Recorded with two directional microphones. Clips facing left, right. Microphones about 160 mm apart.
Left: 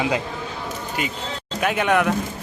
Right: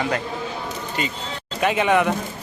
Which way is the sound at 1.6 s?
Centre (ahead or behind).